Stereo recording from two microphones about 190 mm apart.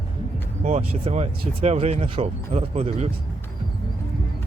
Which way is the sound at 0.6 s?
35° right (ahead or behind).